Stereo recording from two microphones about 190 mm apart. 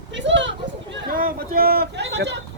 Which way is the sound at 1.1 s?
50° right (ahead or behind).